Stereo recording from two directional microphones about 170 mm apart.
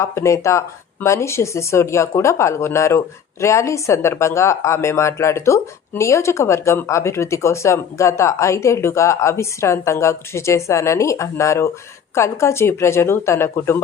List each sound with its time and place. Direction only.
0.0 s speech: 15° left (ahead or behind)